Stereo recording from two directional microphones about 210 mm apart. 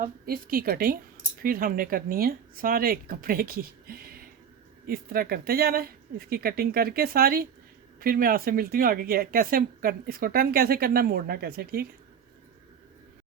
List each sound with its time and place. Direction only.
0.0 s speech: 45° right (ahead or behind)